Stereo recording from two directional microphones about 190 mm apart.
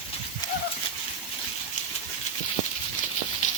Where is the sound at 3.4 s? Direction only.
40° left (ahead or behind).